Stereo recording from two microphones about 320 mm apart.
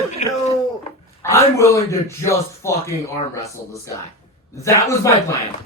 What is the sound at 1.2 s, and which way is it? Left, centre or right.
Speech, centre.